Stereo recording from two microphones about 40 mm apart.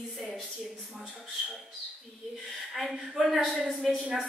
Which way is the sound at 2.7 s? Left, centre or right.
Centre.